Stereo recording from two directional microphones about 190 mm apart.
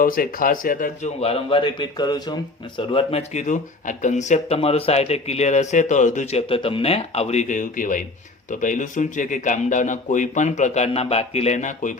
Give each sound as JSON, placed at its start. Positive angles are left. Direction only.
{"t": 0.0, "sound": "speech", "side_deg": 50}
{"t": 1.2, "sound": "speech", "side_deg": 30}